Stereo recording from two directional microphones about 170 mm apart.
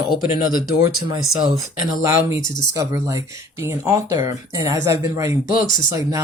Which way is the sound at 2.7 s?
20° right (ahead or behind).